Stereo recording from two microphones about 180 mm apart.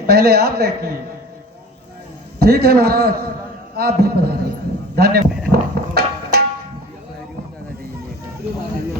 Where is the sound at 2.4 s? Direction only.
60° right (ahead or behind).